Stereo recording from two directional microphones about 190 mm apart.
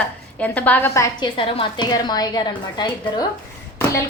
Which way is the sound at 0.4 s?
10° left (ahead or behind).